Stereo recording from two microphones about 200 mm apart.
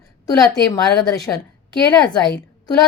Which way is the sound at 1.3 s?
15° left (ahead or behind).